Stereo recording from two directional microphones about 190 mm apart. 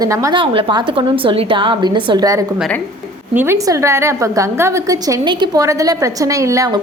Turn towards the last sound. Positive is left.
turn(degrees=-20)  # may be behind; listen again after turning